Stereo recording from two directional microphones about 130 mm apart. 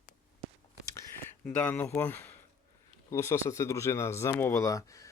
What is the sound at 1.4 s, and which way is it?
Speech, 15° left (ahead or behind).